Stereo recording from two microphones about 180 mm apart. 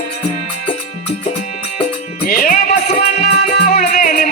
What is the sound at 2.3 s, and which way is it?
Music, 55° left (ahead or behind).